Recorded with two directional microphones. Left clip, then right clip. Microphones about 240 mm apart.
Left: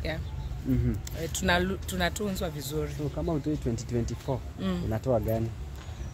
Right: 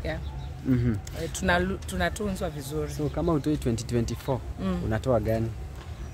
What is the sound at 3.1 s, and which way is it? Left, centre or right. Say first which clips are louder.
Speech: right 5 dB; right.